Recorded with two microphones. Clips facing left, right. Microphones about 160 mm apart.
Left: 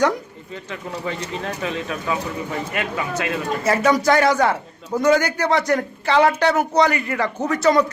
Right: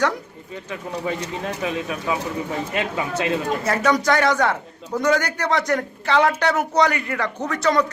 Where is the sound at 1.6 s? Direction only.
15° right (ahead or behind).